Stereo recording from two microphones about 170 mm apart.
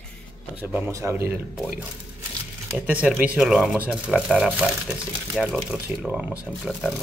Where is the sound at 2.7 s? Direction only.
10° right (ahead or behind).